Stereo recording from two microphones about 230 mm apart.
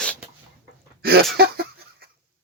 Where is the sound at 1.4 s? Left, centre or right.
Right.